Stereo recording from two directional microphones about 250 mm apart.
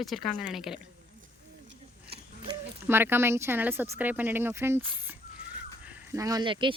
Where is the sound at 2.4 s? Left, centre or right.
Centre.